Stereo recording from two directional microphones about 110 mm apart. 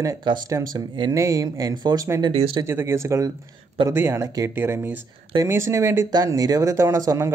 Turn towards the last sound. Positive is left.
turn(degrees=-30)  # may be behind; listen again after turning